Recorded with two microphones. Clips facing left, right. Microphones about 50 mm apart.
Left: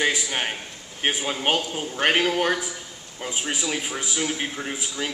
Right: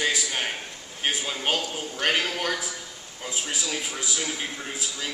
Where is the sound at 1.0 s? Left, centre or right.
Left.